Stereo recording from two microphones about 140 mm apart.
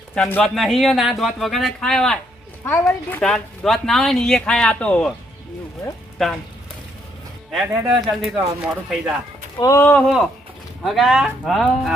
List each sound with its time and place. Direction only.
0.3 s speech: 5° left (ahead or behind)
2.6 s a woman's voice: 15° left (ahead or behind)
7.5 s speech: 5° right (ahead or behind)
9.6 s speech: 20° left (ahead or behind)
10.8 s speech: centre (ahead or behind)